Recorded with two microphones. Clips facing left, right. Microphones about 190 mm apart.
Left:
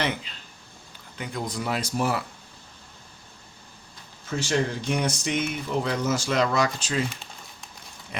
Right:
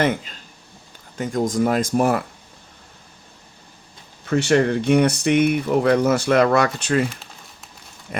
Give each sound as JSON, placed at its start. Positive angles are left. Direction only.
{"t": 0.0, "sound": "speech", "side_deg": -45}
{"t": 4.3, "sound": "speech", "side_deg": -65}